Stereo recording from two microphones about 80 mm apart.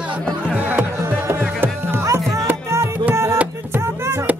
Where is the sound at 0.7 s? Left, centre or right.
Right.